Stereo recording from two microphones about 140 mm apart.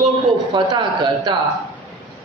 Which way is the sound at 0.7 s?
35° right (ahead or behind).